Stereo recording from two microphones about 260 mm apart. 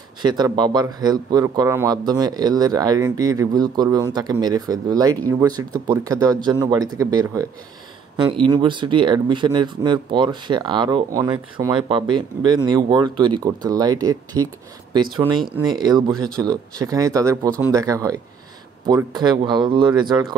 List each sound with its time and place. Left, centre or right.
0.2 s a man's voice: centre
15.7 s a man's voice: centre
16.1 s speech: centre
16.4 s a man's voice: centre